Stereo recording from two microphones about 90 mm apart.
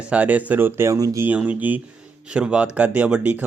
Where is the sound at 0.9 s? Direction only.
40° right (ahead or behind).